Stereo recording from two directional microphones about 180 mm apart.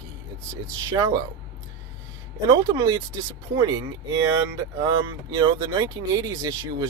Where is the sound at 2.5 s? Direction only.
20° right (ahead or behind).